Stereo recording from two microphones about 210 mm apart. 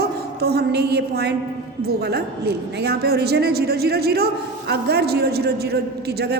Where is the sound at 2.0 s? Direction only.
50° right (ahead or behind).